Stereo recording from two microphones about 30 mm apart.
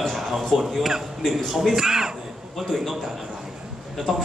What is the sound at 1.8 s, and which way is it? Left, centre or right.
Speech, right.